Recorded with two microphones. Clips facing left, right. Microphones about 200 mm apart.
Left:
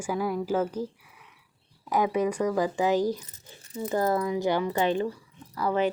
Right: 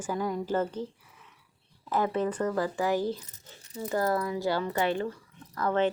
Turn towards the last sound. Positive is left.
turn(degrees=10)  # may be behind; listen again after turning